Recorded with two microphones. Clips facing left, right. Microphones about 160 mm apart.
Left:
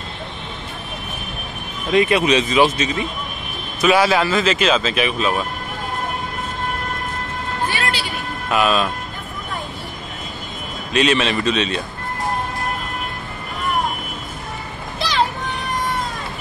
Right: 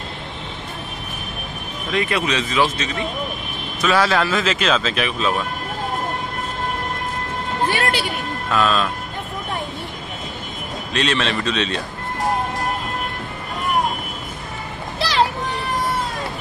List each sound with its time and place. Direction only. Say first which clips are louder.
1.9 s speech: left 6 dB; 20° left (ahead or behind); by 5.3 s 5° left (ahead or behind)
8.5 s speech: left 1 dB; 10° left (ahead or behind)
10.9 s speech: left 4 dB; 5° left (ahead or behind)
15.0 s a sound: right 1 dB; 5° right (ahead or behind)